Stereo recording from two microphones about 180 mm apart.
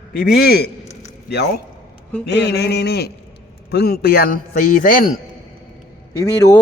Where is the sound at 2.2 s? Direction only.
65° left (ahead or behind); by 5.1 s 50° left (ahead or behind).